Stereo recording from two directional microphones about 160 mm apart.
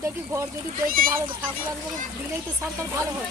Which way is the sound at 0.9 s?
60° right (ahead or behind).